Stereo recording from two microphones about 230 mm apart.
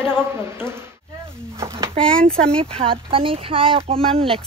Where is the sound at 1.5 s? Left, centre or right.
Centre.